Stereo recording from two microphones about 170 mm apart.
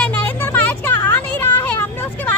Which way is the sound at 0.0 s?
10° left (ahead or behind).